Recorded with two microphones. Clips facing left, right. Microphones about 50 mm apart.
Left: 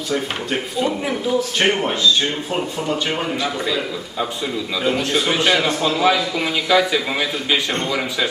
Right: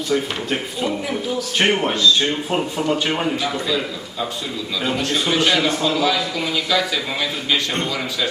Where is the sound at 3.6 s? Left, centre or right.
Centre.